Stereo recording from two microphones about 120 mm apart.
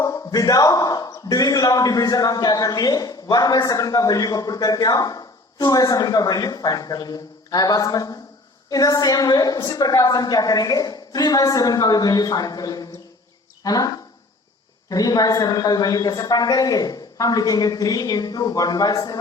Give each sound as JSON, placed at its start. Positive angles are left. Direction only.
{"t": 0.0, "sound": "speech", "side_deg": 30}